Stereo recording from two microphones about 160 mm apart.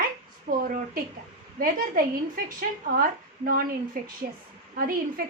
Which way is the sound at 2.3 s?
65° right (ahead or behind).